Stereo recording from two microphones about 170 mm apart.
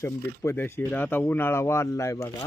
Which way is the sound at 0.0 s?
15° left (ahead or behind).